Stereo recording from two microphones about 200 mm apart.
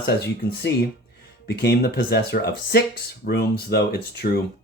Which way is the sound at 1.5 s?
50° left (ahead or behind).